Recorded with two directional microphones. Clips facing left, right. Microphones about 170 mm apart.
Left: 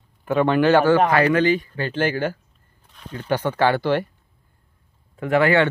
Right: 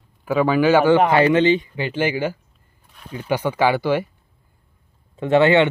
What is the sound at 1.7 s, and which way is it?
Speech, 10° right (ahead or behind).